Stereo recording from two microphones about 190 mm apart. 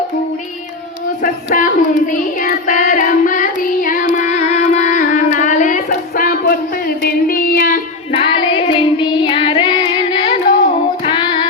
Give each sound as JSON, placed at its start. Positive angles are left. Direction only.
{"t": 1.5, "sound": "child singing", "side_deg": 45}
{"t": 4.1, "sound": "a sound", "side_deg": 40}
{"t": 8.1, "sound": "child singing", "side_deg": 25}